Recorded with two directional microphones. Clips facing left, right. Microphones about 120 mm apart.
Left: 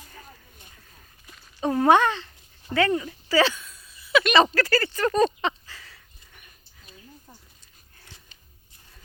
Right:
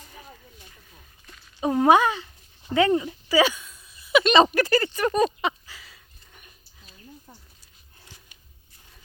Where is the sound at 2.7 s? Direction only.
20° right (ahead or behind).